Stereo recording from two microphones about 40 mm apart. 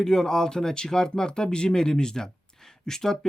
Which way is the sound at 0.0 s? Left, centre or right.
Centre.